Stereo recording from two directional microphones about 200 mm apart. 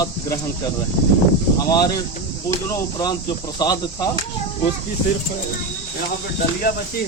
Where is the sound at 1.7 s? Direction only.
20° left (ahead or behind).